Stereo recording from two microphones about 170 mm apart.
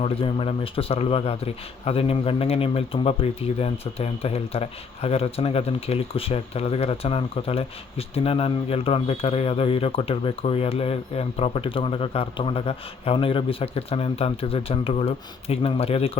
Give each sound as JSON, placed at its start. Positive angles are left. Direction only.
{"t": 0.0, "sound": "speech", "side_deg": 35}